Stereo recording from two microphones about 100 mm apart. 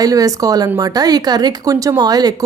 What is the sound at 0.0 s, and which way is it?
Speech, 35° right (ahead or behind).